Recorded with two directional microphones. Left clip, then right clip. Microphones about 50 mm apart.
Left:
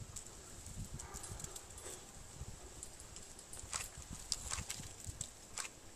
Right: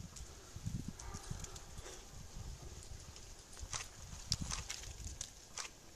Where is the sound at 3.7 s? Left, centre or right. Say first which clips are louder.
Even; right.